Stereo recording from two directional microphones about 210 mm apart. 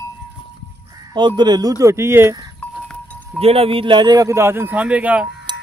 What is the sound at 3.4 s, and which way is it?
A man's voice, 30° right (ahead or behind).